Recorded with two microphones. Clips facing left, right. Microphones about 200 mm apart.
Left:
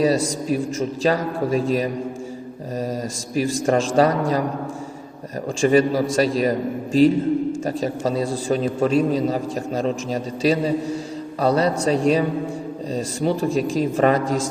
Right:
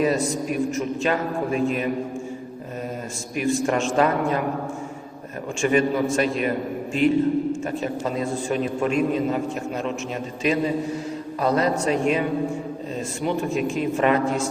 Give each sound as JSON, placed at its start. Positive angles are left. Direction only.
{"t": 0.4, "sound": "a man's voice", "side_deg": 35}
{"t": 3.3, "sound": "a man's voice", "side_deg": 35}
{"t": 5.5, "sound": "a man's voice", "side_deg": 35}